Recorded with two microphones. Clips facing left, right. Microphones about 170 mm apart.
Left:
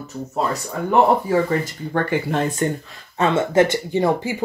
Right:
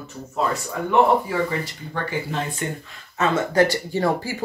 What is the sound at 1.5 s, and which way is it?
Speech, 50° left (ahead or behind).